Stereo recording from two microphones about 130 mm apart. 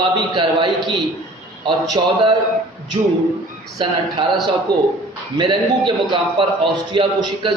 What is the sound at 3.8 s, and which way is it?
A man's voice, 35° right (ahead or behind).